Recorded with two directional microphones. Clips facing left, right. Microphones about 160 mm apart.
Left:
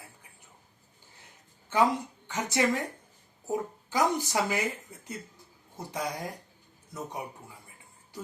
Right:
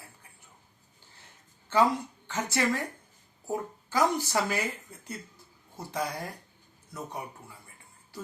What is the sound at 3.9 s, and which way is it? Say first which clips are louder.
Speech: right 1 dB; 15° left (ahead or behind).